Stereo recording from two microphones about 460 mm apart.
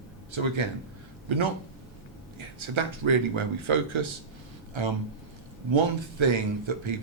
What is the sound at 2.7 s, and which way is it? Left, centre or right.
Speech, right.